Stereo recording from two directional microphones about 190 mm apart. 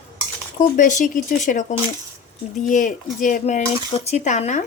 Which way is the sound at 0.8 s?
45° left (ahead or behind).